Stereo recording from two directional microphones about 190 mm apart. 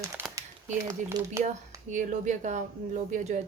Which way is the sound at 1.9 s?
40° right (ahead or behind).